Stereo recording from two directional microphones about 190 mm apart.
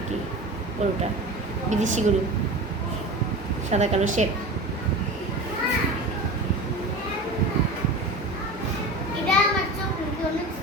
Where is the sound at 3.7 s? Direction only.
40° right (ahead or behind).